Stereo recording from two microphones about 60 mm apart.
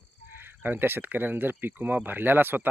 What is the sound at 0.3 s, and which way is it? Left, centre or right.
Speech, right.